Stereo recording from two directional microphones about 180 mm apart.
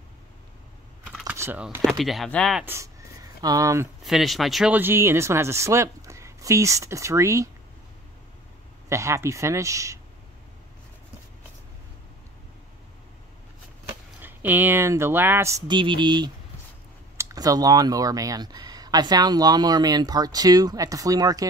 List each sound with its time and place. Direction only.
1.0 s typing: 5° right (ahead or behind)
1.9 s speech: centre (ahead or behind)
2.6 s speech: 15° right (ahead or behind)
4.0 s speech: centre (ahead or behind); by 7.4 s 15° right (ahead or behind)
8.8 s speech: 15° right (ahead or behind)
14.2 s speech: 10° right (ahead or behind)